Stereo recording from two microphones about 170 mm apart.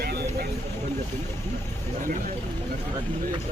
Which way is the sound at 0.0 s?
70° right (ahead or behind).